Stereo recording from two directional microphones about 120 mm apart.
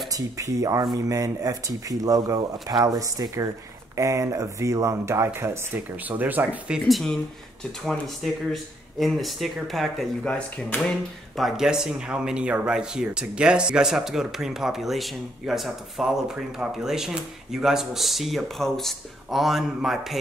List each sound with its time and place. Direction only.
0.1 s speech: 30° right (ahead or behind)
6.9 s speech: centre (ahead or behind)
11.3 s speech: 5° right (ahead or behind)